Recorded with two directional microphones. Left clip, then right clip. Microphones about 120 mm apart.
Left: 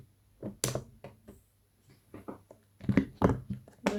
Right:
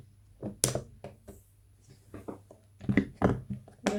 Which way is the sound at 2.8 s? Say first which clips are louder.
Even; 25° left (ahead or behind).